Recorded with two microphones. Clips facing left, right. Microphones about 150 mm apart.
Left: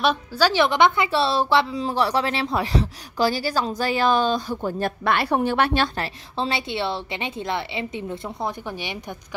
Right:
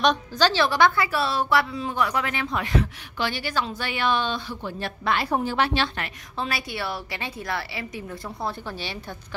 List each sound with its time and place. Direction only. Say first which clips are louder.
0.0 s a woman's voice: left 1 dB; 5° left (ahead or behind); by 5.9 s 60° left (ahead or behind)
5.9 s a woman's voice: left 4 dB; 30° left (ahead or behind)